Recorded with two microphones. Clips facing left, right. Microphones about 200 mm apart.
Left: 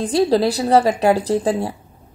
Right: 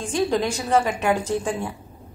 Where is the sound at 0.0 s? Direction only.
35° left (ahead or behind).